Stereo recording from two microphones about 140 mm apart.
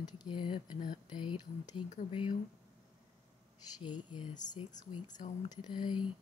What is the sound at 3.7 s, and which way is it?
Speech, 30° left (ahead or behind).